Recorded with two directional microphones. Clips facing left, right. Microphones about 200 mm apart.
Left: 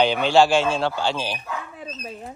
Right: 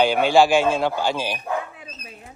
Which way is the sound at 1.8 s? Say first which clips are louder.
Left 7 dB; 35° left (ahead or behind).